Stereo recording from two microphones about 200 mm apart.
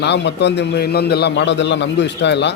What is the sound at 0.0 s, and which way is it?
A man's voice, 60° left (ahead or behind).